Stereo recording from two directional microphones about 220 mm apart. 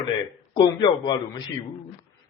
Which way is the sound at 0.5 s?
20° left (ahead or behind).